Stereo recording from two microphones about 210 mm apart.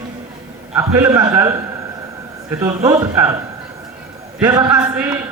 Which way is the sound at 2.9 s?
15° right (ahead or behind).